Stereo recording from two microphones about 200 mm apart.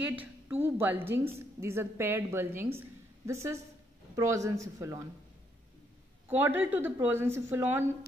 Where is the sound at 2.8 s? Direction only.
15° right (ahead or behind).